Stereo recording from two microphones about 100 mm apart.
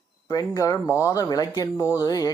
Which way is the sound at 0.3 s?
35° left (ahead or behind).